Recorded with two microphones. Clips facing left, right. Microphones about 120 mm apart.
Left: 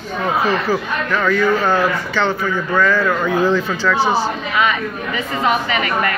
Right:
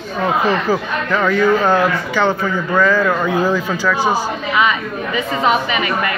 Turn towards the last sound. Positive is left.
turn(degrees=-20)  # may be behind; listen again after turning